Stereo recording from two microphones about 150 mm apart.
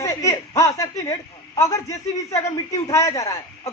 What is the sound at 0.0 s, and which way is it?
Chuckle, 20° left (ahead or behind).